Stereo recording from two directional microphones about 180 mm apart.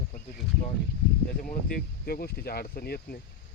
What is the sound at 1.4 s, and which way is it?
Speech, 50° left (ahead or behind).